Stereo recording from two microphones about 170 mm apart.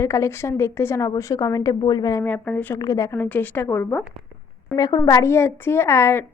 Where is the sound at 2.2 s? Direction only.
10° left (ahead or behind).